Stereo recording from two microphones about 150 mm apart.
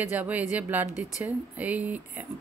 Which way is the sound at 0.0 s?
10° right (ahead or behind).